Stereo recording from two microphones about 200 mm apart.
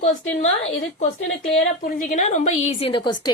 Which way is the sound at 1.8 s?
40° left (ahead or behind).